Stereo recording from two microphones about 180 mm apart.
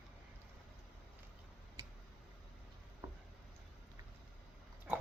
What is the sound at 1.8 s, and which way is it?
Tick-tock, 20° right (ahead or behind).